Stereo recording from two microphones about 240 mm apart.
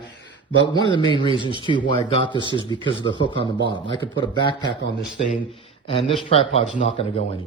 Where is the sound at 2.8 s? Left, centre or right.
Centre.